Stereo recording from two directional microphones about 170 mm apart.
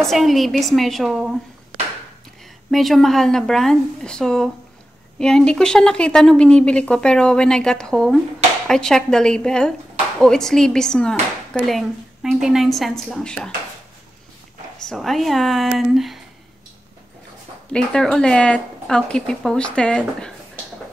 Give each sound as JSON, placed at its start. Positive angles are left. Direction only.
{"t": 0.0, "sound": "speech", "side_deg": 0}
{"t": 2.7, "sound": "speech", "side_deg": 0}
{"t": 14.9, "sound": "speech", "side_deg": 0}
{"t": 17.7, "sound": "speech", "side_deg": 5}